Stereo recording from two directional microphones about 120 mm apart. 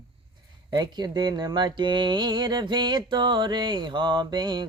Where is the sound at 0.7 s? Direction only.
35° right (ahead or behind).